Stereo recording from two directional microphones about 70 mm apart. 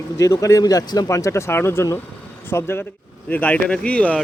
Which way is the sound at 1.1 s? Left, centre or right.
Left.